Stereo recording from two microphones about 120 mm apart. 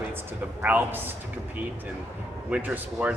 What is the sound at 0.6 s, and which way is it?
Speech, 15° right (ahead or behind).